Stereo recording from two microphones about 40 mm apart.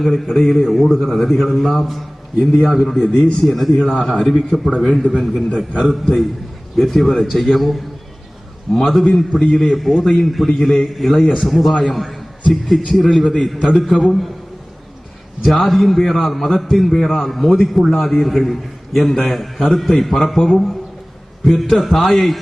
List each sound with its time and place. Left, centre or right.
0.0 s a man's voice: centre
6.7 s a man's voice: centre
15.4 s a man's voice: centre